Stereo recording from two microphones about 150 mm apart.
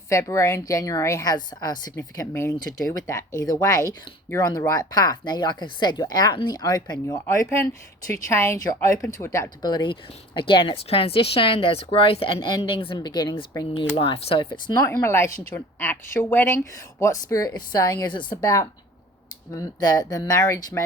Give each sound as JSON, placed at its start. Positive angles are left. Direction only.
{"t": 0.1, "sound": "speech", "side_deg": 20}
{"t": 13.9, "sound": "speech", "side_deg": 40}